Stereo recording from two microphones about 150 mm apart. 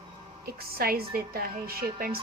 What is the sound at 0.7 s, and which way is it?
A woman's voice, 85° right.